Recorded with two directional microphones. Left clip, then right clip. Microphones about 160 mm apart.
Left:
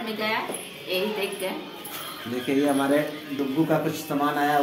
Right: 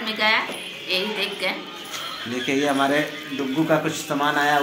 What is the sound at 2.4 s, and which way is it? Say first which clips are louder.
A man's voice: right 2 dB; 10° right (ahead or behind).